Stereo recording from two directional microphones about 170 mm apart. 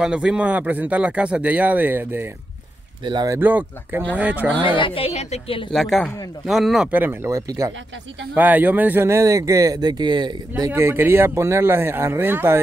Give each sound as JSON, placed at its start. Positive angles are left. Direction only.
{"t": 0.0, "sound": "speech", "side_deg": -5}
{"t": 3.0, "sound": "speech", "side_deg": -25}
{"t": 3.3, "sound": "speech", "side_deg": -10}
{"t": 4.7, "sound": "speech", "side_deg": 30}
{"t": 5.7, "sound": "speech", "side_deg": 0}
{"t": 10.5, "sound": "speech", "side_deg": -15}